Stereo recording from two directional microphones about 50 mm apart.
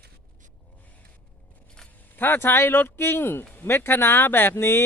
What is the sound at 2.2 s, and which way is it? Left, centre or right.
Speech, left.